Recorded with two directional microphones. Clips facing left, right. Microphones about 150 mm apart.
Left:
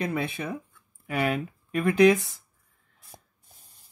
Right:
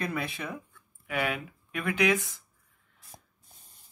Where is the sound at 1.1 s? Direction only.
40° left (ahead or behind).